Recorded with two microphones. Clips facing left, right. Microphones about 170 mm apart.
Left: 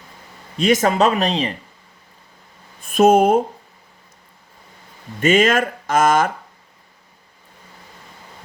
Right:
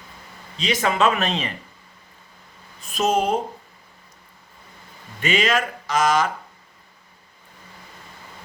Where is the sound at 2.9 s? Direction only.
55° left (ahead or behind).